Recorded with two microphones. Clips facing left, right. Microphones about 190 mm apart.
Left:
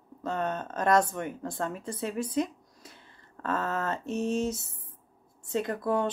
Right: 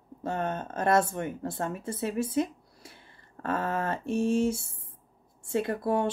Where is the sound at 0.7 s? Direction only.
25° right (ahead or behind).